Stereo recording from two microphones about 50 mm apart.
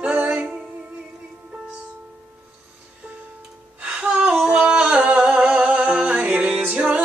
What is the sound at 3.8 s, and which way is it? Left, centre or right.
Music, centre.